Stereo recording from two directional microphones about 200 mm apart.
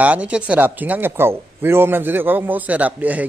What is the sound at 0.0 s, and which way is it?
Speech, 5° right (ahead or behind).